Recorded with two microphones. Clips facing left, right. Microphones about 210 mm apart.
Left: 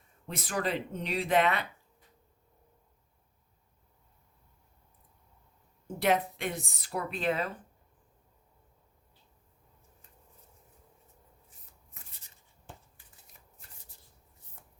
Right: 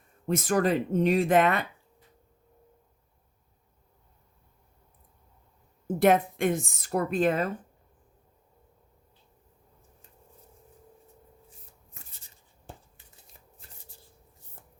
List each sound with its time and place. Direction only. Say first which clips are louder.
0.3 s speech: right 8 dB; 45° right (ahead or behind)
6.0 s speech: right 6 dB; 50° right (ahead or behind)
12.7 s a sound: right 4 dB; 35° right (ahead or behind)